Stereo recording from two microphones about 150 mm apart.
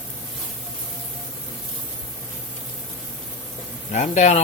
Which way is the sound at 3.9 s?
55° left (ahead or behind).